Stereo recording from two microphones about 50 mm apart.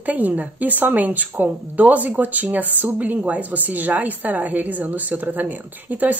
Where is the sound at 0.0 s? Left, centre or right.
Right.